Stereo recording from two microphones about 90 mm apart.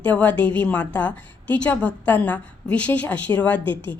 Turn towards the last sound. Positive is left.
turn(degrees=15)  # may be behind; listen again after turning